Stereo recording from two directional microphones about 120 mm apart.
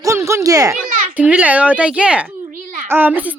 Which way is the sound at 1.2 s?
10° right (ahead or behind).